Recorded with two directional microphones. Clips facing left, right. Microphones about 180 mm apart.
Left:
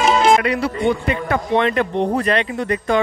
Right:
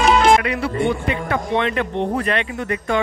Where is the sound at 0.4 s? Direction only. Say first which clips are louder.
Left 3 dB; 35° left (ahead or behind).